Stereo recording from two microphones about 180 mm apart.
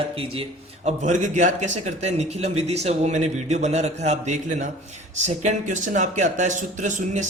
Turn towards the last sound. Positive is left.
turn(degrees=-45)  # may be behind; listen again after turning